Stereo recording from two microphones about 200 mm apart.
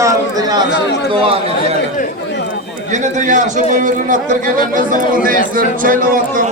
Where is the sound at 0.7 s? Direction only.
55° left (ahead or behind).